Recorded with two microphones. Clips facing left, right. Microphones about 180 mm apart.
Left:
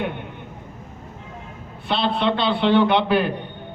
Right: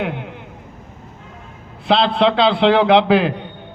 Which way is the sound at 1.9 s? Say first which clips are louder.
Right 6 dB; 90° right.